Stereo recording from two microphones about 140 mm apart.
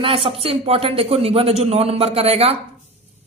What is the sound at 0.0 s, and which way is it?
Speech, 40° right (ahead or behind).